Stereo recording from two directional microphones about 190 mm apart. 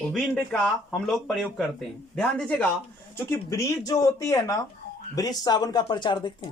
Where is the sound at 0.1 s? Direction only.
5° left (ahead or behind).